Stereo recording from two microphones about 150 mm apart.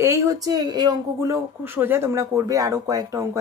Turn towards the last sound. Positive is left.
turn(degrees=-20)  # may be behind; listen again after turning